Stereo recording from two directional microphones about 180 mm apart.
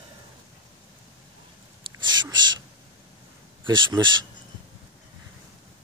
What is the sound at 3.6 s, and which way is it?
Speech, 25° right (ahead or behind).